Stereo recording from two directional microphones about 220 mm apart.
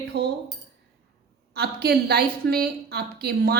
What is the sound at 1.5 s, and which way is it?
A woman's voice, 45° right (ahead or behind).